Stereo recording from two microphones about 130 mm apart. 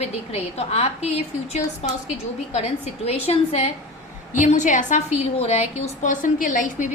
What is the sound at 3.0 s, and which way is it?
Speech, 50° left (ahead or behind).